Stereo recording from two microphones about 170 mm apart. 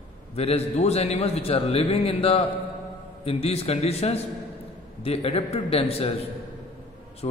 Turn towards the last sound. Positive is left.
turn(degrees=35)  # may be behind; listen again after turning